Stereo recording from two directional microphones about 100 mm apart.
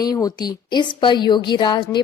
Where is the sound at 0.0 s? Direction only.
40° left (ahead or behind).